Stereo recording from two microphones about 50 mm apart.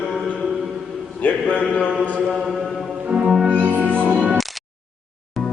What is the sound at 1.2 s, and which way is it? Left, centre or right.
Speech, left.